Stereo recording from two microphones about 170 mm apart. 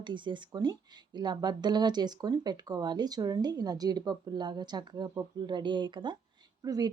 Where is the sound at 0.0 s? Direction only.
30° right (ahead or behind).